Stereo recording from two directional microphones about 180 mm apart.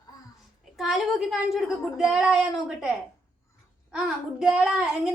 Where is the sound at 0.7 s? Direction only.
Centre (ahead or behind).